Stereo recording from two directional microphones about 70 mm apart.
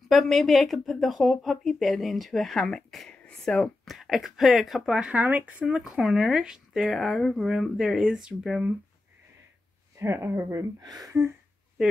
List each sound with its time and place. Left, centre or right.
0.1 s a woman's voice: centre
3.8 s a woman's voice: centre
5.0 s speech: centre
9.9 s speech: right
10.8 s speech: right